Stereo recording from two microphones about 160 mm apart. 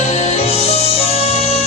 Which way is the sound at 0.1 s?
45° left (ahead or behind).